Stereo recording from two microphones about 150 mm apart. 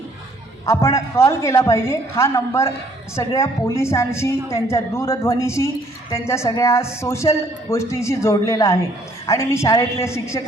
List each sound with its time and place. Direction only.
0.6 s a woman's voice: 20° left (ahead or behind)